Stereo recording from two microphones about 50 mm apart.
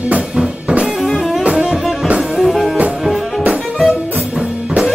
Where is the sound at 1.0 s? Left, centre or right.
Centre.